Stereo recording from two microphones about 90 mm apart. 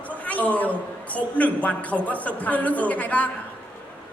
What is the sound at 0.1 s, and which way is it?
A woman's voice, 15° left (ahead or behind).